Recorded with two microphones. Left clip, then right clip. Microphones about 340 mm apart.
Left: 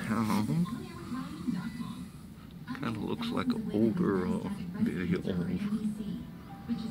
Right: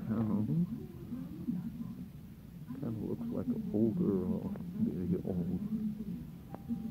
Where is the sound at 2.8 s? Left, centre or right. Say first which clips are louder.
Left 5 dB; left.